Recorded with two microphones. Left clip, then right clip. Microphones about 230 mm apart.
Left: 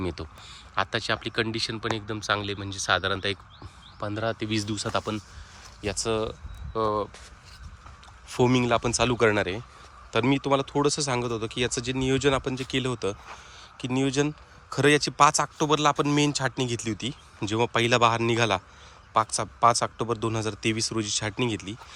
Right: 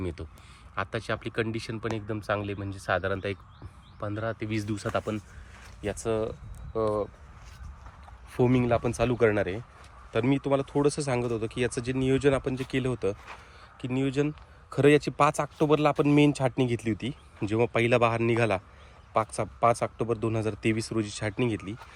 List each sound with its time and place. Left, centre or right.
0.0 s speech: centre
8.3 s speech: centre